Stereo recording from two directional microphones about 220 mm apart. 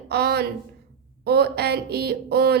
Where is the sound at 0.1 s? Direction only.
45° right (ahead or behind).